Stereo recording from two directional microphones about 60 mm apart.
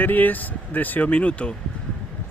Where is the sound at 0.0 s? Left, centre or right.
Left.